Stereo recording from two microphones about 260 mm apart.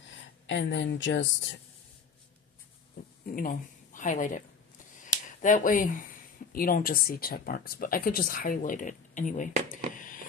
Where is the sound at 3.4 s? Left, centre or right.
Left.